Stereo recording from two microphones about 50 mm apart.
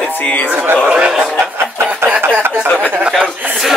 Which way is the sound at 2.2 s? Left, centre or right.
Right.